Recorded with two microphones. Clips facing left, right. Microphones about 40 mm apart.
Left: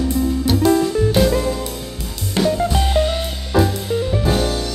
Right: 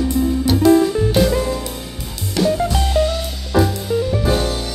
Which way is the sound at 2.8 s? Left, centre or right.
Centre.